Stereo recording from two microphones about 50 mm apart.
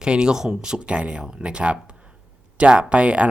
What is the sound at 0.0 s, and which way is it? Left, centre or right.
Speech, centre.